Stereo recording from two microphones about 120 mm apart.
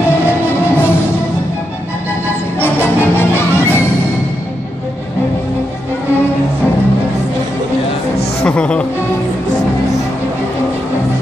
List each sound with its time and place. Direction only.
2.6 s music: 20° left (ahead or behind)
8.5 s music: 10° left (ahead or behind)